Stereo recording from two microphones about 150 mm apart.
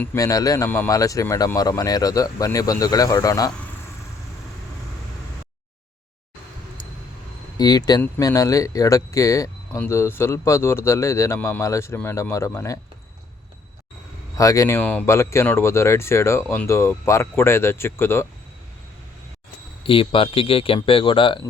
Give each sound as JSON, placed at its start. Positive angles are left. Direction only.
{"t": 0.2, "sound": "speech", "side_deg": 25}
{"t": 7.6, "sound": "speech", "side_deg": 25}
{"t": 14.3, "sound": "speech", "side_deg": 20}
{"t": 19.8, "sound": "a man's voice", "side_deg": 35}